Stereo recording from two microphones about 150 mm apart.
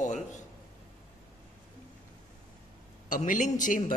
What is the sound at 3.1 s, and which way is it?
Speech, 60° left (ahead or behind).